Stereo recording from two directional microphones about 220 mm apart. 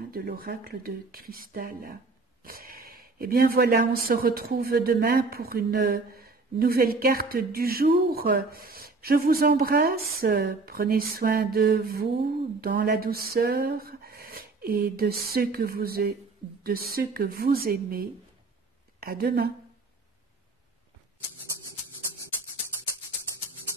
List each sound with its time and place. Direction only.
0.1 s a woman's voice: 40° right (ahead or behind)